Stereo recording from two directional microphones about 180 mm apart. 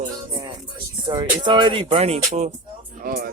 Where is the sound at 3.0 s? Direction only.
50° right (ahead or behind).